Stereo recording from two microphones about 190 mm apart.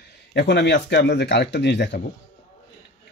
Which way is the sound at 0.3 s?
60° left (ahead or behind).